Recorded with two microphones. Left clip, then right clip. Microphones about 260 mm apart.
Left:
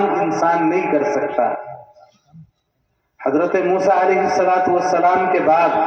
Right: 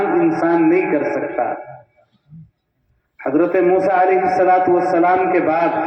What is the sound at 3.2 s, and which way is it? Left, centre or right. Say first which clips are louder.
A man's voice: right 1 dB; left.